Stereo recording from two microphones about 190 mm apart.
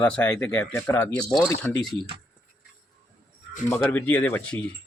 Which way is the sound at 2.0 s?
25° right (ahead or behind).